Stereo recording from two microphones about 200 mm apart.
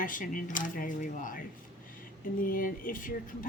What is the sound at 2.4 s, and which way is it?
Speech, 45° left (ahead or behind).